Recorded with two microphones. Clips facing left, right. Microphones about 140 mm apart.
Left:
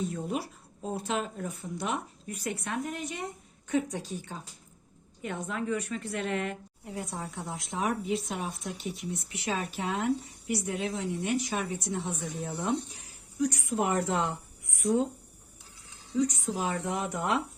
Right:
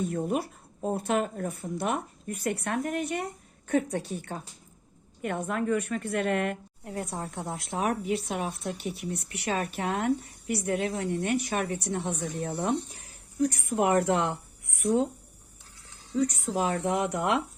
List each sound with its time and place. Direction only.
0.0 s a woman's voice: 55° right (ahead or behind)
12.6 s speech: 50° right (ahead or behind)
16.1 s a woman's voice: 60° right (ahead or behind)